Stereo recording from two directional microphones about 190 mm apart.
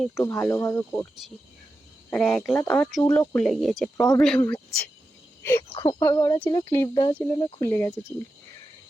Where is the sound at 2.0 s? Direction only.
5° left (ahead or behind).